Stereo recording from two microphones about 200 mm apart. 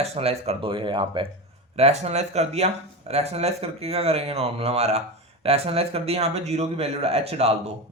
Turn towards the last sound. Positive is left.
turn(degrees=-30)  # may be behind; listen again after turning